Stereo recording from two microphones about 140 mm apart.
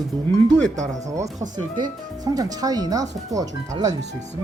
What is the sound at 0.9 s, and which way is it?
Speech, 25° right (ahead or behind).